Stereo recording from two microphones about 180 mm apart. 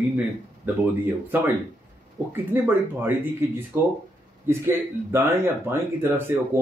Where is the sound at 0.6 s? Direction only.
10° right (ahead or behind).